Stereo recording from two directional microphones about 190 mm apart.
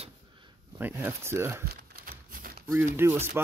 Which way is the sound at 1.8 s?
50° right (ahead or behind).